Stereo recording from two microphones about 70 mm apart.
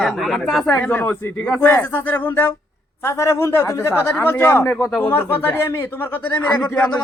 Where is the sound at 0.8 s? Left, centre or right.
Left.